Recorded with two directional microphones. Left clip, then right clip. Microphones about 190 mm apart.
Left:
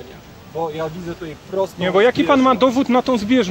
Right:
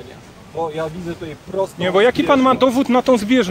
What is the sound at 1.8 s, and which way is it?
Speech, 50° right (ahead or behind).